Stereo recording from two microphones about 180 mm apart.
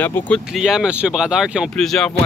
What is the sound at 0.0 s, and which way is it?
Speech, 10° left (ahead or behind).